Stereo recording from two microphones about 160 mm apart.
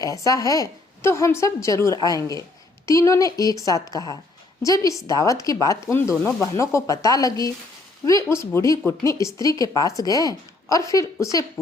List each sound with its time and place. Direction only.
0.0 s speech: 20° left (ahead or behind)